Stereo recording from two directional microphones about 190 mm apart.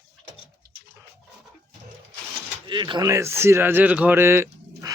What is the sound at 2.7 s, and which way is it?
Speech, 25° right (ahead or behind).